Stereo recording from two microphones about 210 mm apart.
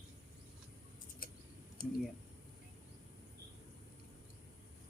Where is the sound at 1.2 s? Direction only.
40° left (ahead or behind).